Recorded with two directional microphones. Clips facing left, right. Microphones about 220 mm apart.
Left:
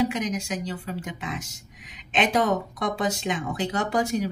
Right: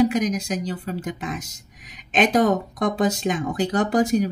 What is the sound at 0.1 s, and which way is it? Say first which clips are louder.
Speech: right 5 dB; 40° right (ahead or behind).